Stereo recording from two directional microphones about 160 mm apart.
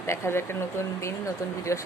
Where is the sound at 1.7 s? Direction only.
20° left (ahead or behind).